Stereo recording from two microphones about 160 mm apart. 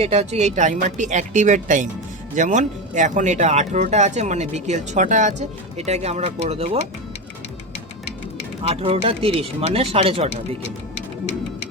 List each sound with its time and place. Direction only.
0.0 s speech: 40° right (ahead or behind)
8.6 s speech: 40° right (ahead or behind)